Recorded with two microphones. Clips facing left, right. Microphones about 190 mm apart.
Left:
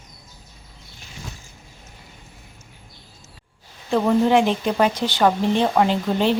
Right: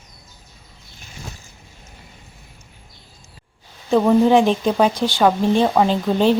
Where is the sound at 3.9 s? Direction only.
15° right (ahead or behind).